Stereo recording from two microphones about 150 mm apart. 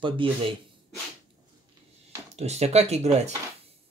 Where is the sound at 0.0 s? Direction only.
35° right (ahead or behind).